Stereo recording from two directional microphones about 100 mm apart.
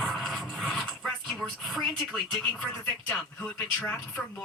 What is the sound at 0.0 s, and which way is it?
Music, centre (ahead or behind).